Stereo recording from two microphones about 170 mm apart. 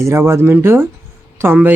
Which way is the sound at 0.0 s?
15° right (ahead or behind).